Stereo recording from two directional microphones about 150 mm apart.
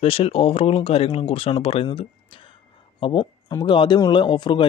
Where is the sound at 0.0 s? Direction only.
40° left (ahead or behind).